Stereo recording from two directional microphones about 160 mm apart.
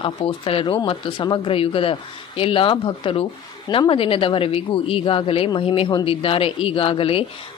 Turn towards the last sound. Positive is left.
turn(degrees=35)  # may be behind; listen again after turning